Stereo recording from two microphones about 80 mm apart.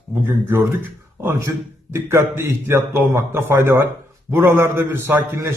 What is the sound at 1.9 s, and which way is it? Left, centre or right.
A man's voice, right.